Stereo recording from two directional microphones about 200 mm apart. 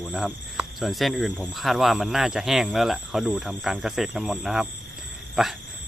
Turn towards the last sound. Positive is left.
turn(degrees=0)  # may be behind; listen again after turning